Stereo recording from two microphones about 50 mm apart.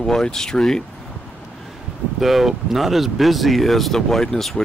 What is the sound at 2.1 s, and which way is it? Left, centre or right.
Speech, centre.